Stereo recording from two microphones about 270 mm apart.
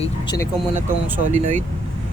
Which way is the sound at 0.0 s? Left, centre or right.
Centre.